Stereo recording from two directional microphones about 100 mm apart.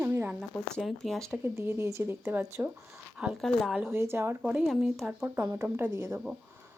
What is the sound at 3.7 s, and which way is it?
Speech, 20° right (ahead or behind).